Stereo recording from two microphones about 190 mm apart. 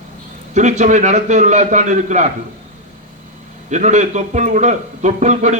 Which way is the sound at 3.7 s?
40° right (ahead or behind).